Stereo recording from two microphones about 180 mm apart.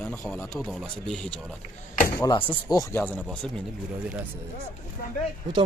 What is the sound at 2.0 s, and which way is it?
A man's voice, 15° left (ahead or behind).